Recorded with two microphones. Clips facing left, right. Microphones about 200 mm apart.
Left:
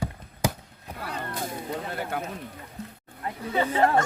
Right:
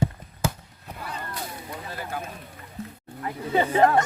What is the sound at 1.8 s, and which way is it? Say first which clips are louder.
Speech: left 3 dB; 60° left (ahead or behind).